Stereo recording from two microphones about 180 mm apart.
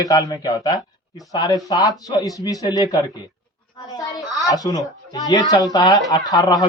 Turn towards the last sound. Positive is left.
turn(degrees=20)  # may be behind; listen again after turning